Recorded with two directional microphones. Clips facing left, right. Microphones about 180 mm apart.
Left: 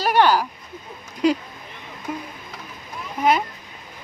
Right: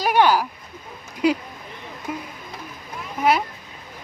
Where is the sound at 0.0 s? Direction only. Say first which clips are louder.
Even; 10° right (ahead or behind).